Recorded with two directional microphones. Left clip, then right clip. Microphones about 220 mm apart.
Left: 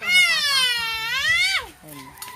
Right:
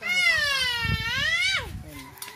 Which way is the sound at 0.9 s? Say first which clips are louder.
Left 4 dB; 35° left (ahead or behind).